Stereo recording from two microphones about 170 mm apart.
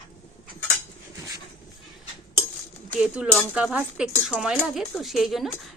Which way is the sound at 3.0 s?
5° right (ahead or behind).